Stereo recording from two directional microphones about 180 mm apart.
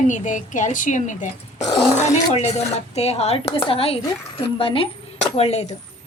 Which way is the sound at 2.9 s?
35° left (ahead or behind).